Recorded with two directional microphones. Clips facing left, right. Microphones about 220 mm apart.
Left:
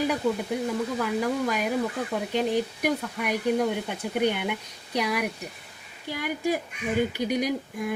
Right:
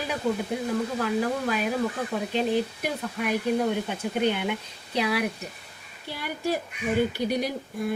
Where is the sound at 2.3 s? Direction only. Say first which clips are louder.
Even; 15° left (ahead or behind).